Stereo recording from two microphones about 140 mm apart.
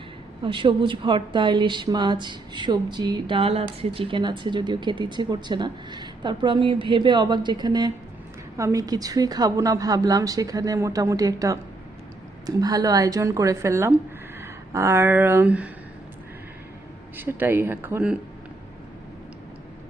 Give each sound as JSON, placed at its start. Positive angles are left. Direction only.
{"t": 0.4, "sound": "a woman's voice", "side_deg": -35}
{"t": 17.2, "sound": "speech", "side_deg": -15}